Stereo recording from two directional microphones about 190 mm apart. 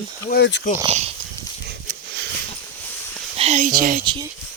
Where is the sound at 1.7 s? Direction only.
55° right (ahead or behind).